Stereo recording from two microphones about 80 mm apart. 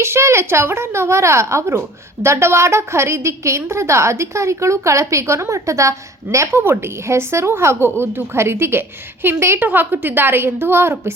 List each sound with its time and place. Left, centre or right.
0.0 s a woman's voice: right